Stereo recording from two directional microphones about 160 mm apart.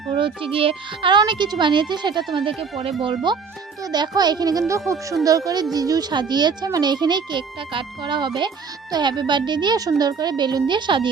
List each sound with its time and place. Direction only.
0.2 s speech: 35° right (ahead or behind)